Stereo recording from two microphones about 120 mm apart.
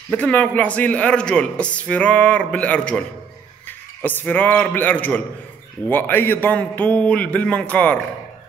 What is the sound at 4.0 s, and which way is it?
A man's voice, 15° left (ahead or behind).